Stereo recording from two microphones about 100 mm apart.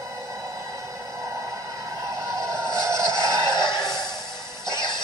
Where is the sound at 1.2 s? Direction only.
35° right (ahead or behind).